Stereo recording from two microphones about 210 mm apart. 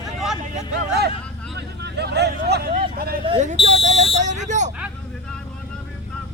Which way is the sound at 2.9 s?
45° right (ahead or behind).